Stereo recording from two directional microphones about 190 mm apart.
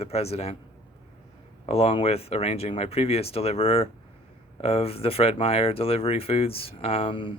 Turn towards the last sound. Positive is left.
turn(degrees=25)  # may be behind; listen again after turning